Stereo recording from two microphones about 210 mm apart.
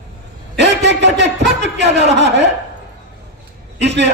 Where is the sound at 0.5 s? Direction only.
55° right (ahead or behind).